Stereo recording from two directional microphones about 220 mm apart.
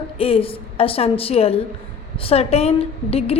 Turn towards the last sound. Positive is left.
turn(degrees=25)  # may be behind; listen again after turning